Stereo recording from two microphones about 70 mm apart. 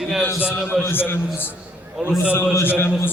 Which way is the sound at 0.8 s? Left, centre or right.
Left.